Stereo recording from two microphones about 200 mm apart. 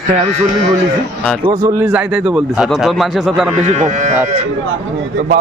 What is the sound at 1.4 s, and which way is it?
Speech, 20° right (ahead or behind).